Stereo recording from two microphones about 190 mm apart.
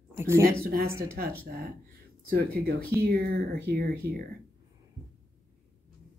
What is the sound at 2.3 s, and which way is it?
Speech, 55° right (ahead or behind).